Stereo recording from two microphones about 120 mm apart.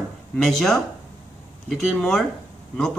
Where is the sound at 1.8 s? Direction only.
5° left (ahead or behind).